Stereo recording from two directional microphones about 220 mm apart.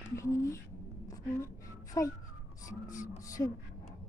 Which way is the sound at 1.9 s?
15° left (ahead or behind).